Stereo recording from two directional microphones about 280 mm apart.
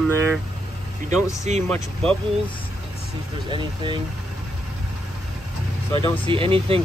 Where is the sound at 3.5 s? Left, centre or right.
Centre.